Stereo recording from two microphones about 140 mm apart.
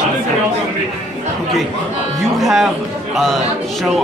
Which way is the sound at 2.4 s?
Centre (ahead or behind).